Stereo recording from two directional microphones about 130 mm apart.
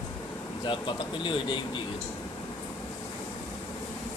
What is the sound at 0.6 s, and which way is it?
Speech, 40° left (ahead or behind).